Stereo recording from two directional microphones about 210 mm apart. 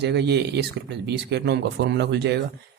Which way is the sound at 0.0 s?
55° right (ahead or behind).